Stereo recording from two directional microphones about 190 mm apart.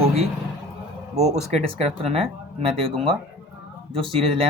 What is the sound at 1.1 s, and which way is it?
Speech, 35° right (ahead or behind).